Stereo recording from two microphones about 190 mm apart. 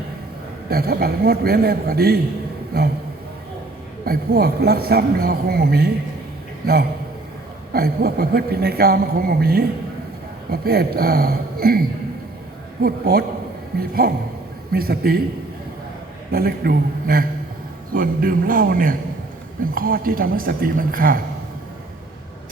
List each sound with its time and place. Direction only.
0.7 s a woman's voice: 55° right (ahead or behind)
4.0 s a woman's voice: 55° right (ahead or behind)
7.7 s a woman's voice: 55° right (ahead or behind)
12.8 s a woman's voice: 55° right (ahead or behind)
16.3 s a man's voice: 55° right (ahead or behind)